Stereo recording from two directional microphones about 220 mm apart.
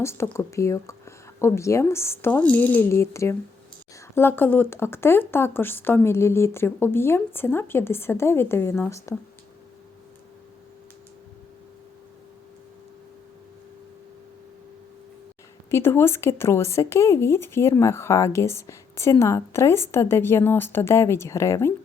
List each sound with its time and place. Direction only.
0.0 s speech: 10° left (ahead or behind)
15.7 s speech: 10° left (ahead or behind)